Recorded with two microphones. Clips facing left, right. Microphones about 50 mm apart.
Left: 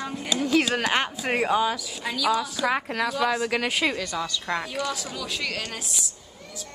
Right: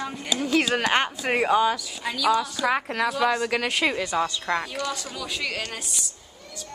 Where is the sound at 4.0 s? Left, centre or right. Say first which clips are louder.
Right 4 dB; right.